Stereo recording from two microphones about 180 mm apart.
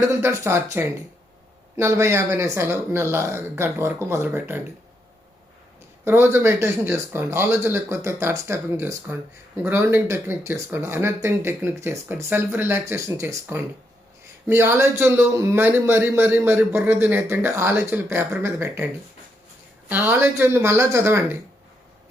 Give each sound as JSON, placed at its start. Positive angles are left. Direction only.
{"t": 0.1, "sound": "a man's voice", "side_deg": -15}
{"t": 6.1, "sound": "a man's voice", "side_deg": -15}
{"t": 19.9, "sound": "a man's voice", "side_deg": -10}